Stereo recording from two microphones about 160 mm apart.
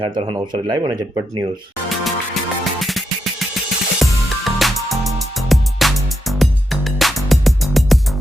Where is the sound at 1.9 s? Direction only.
Centre (ahead or behind).